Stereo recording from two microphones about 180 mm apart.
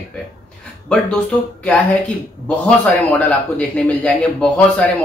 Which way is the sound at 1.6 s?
5° left (ahead or behind).